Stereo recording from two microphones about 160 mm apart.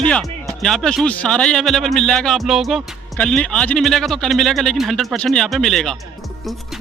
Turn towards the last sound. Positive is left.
turn(degrees=5)  # may be behind; listen again after turning